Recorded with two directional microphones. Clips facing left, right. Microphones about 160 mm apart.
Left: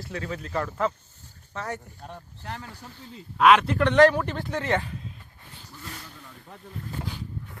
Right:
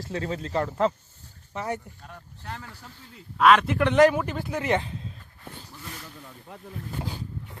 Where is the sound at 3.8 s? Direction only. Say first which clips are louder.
Left 1 dB; 5° right (ahead or behind).